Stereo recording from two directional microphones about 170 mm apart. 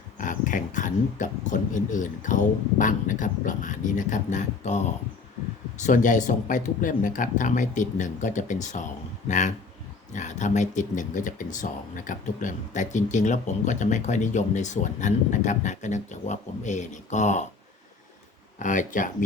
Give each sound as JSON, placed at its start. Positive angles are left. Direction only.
{"t": 0.2, "sound": "speech", "side_deg": 50}
{"t": 18.6, "sound": "speech", "side_deg": 50}